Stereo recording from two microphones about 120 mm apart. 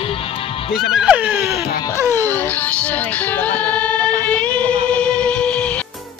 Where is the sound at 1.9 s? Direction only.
25° right (ahead or behind).